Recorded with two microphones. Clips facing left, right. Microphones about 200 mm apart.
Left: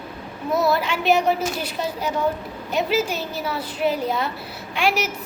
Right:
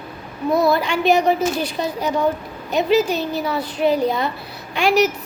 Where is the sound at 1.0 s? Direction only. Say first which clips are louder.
Right 3 dB; 35° right (ahead or behind).